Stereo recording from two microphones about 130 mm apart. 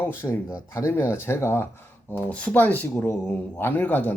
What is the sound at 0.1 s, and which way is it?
Speech, 20° left (ahead or behind).